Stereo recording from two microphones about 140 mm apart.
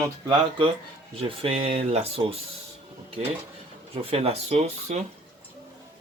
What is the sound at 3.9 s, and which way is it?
Speech, 45° right (ahead or behind).